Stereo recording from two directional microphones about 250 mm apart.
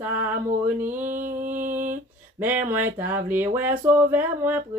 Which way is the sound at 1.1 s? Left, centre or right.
Right.